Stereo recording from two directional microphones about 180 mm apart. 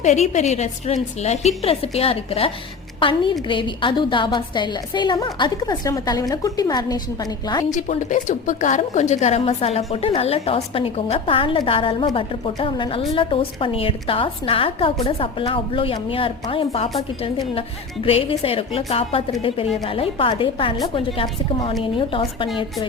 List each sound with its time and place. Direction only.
0.0 s a woman's voice: 40° left (ahead or behind); by 7.6 s 20° left (ahead or behind)
7.7 s a woman's voice: 45° left (ahead or behind)
18.0 s a woman's voice: 30° left (ahead or behind)